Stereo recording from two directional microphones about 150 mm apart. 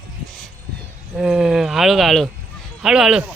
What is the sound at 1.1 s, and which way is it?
Speech, centre (ahead or behind).